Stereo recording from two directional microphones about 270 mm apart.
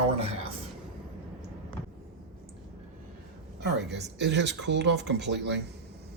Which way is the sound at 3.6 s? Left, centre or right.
Right.